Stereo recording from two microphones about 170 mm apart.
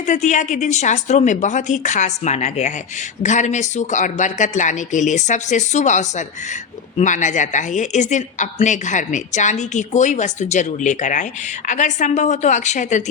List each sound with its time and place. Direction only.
0.0 s a woman's voice: 45° left (ahead or behind)